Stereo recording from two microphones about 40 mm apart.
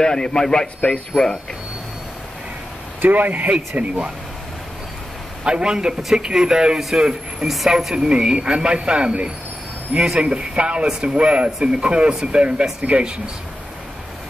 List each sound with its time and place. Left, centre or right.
0.0 s a man's voice: centre
3.0 s speech: right
5.4 s speech: right
7.4 s a man's voice: centre
7.9 s speech: centre
10.9 s a man's voice: centre
11.1 s speech: right